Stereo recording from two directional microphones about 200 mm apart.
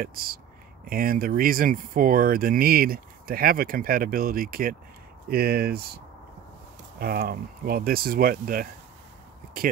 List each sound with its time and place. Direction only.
0.0 s speech: 45° right (ahead or behind)
7.0 s speech: 50° right (ahead or behind)